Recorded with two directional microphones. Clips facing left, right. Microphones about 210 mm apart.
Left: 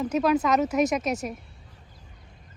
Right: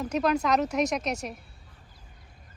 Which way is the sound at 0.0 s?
5° left (ahead or behind).